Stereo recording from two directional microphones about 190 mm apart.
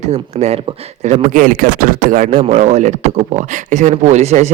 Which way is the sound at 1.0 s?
40° right (ahead or behind).